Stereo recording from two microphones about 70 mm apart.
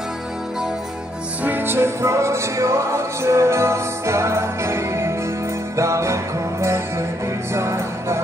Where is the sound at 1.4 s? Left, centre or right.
Right.